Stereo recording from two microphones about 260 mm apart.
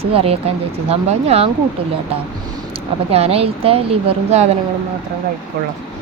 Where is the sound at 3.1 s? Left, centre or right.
Right.